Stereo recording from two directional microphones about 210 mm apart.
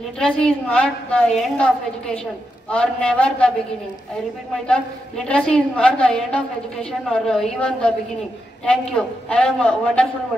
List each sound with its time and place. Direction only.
0.2 s a woman's voice: 5° left (ahead or behind)
4.6 s a woman's voice: 5° left (ahead or behind)